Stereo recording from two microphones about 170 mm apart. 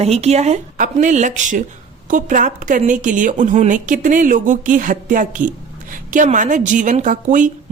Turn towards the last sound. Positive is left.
turn(degrees=-50)  # may be behind; listen again after turning